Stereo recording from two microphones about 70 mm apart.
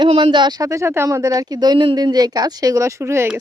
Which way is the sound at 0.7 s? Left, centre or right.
Right.